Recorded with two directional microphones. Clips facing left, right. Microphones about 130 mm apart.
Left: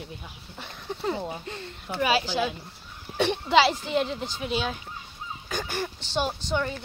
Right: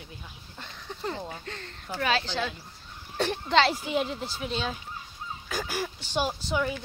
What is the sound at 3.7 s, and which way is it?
Speech, 5° right (ahead or behind).